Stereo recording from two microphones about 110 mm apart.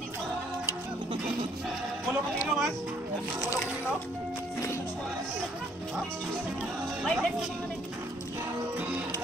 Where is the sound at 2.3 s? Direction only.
5° right (ahead or behind).